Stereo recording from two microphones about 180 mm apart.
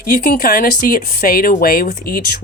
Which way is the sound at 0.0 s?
55° left (ahead or behind).